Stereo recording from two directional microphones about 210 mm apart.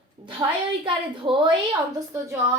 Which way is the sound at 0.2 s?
25° right (ahead or behind).